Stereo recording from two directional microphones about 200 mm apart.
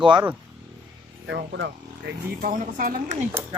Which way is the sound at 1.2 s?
60° right (ahead or behind).